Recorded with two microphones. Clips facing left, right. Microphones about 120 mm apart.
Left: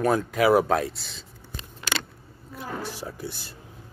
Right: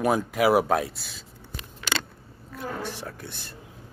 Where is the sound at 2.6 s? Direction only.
5° left (ahead or behind).